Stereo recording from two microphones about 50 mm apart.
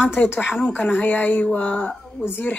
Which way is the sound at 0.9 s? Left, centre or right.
Left.